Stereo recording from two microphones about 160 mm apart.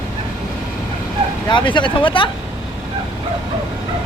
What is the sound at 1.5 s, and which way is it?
Speech, 30° left (ahead or behind).